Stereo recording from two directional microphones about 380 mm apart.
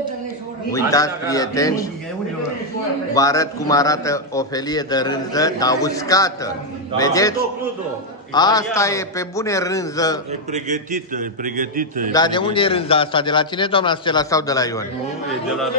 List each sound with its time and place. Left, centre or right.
0.7 s a man's voice: centre
3.2 s a man's voice: centre
10.5 s a man's voice: centre
12.1 s a man's voice: centre